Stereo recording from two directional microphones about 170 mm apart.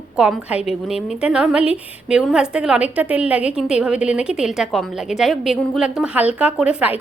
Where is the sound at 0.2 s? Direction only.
5° right (ahead or behind).